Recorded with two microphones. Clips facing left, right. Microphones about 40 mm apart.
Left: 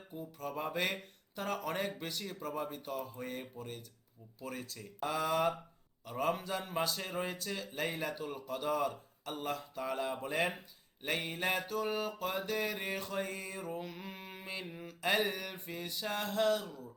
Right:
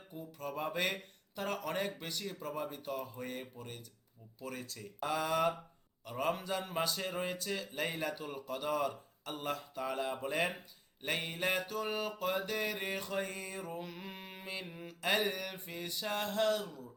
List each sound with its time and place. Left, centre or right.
0.1 s mantra: centre